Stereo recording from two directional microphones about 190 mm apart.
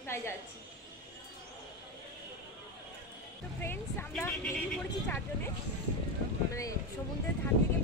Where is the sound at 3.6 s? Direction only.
10° left (ahead or behind).